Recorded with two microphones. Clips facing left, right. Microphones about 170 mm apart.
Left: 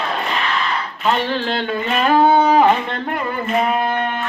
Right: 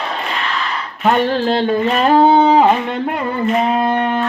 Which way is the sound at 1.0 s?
50° right (ahead or behind).